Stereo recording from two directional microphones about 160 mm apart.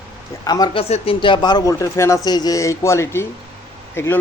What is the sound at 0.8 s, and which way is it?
A man's voice, 40° left (ahead or behind).